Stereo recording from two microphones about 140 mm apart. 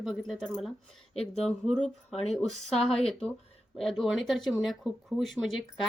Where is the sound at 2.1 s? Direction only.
50° left (ahead or behind).